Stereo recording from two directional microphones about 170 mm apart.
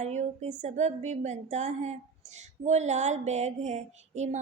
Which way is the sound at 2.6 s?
40° right (ahead or behind).